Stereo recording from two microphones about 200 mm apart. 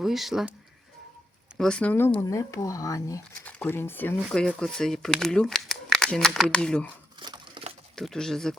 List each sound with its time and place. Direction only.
0.0 s speech: centre (ahead or behind)
1.5 s speech: 5° left (ahead or behind)
7.2 s crumpling: 25° right (ahead or behind)
7.9 s speech: centre (ahead or behind)